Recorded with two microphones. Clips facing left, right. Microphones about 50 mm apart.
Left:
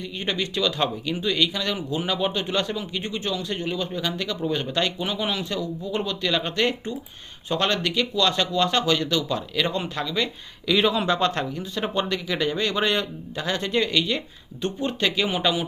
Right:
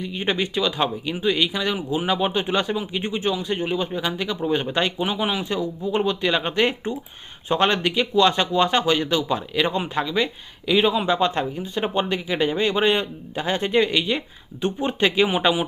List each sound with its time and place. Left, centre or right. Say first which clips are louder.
0.0 s a man's voice: right 4 dB; centre